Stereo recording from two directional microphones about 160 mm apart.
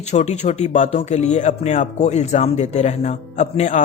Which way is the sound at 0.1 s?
45° left (ahead or behind).